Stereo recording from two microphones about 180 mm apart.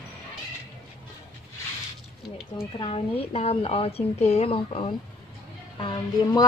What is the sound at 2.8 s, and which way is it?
A woman's voice, 30° left (ahead or behind).